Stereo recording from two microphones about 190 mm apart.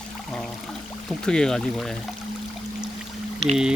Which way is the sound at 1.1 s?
5° left (ahead or behind).